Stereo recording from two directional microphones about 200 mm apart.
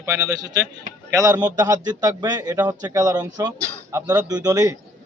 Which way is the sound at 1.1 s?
15° right (ahead or behind).